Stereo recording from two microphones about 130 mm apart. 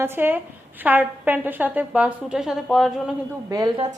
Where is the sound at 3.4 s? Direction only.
25° right (ahead or behind).